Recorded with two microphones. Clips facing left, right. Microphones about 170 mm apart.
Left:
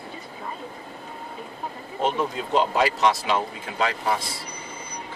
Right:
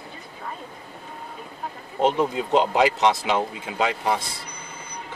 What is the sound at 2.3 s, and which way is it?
Speech, 20° right (ahead or behind).